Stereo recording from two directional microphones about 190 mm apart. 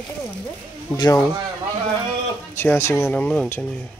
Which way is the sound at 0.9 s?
25° left (ahead or behind).